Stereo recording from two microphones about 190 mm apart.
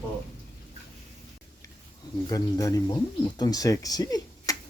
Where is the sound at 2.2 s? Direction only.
20° left (ahead or behind).